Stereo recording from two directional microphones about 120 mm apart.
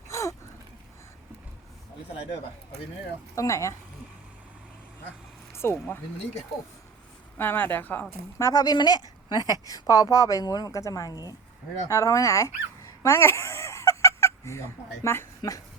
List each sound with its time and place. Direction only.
0.1 s gasp: 25° left (ahead or behind)
3.3 s speech: 25° left (ahead or behind)
5.5 s speech: 20° left (ahead or behind)
7.3 s speech: 15° left (ahead or behind)
8.4 s speech: 30° left (ahead or behind)